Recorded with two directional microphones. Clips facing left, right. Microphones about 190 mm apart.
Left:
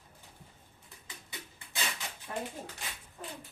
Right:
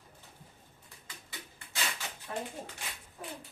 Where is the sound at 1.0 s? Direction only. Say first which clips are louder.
Left 1 dB; 20° left (ahead or behind).